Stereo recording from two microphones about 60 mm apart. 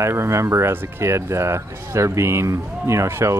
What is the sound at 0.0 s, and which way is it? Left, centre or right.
Speech, right.